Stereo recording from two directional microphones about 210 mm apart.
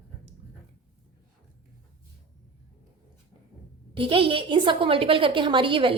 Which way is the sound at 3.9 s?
25° right (ahead or behind).